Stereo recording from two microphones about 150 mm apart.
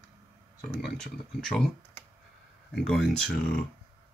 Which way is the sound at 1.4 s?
5° left (ahead or behind).